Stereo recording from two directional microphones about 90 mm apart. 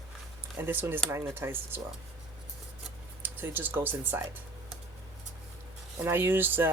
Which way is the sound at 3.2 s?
20° right (ahead or behind).